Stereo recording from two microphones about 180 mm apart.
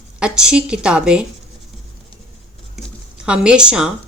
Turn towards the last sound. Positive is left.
turn(degrees=-5)  # may be behind; listen again after turning